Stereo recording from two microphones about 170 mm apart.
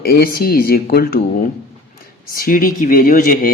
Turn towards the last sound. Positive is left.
turn(degrees=50)  # may be behind; listen again after turning